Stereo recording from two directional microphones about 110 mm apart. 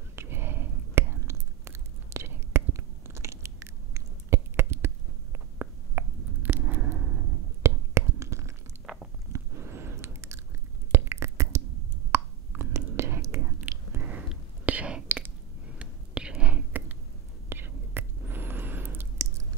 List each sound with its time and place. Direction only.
0.1 s whispering: 20° right (ahead or behind)
8.9 s biting: 5° right (ahead or behind)
9.3 s chewing: 20° right (ahead or behind)
10.9 s beatboxing: 20° right (ahead or behind)
12.1 s whispering: 25° right (ahead or behind)
13.9 s whispering: 15° right (ahead or behind)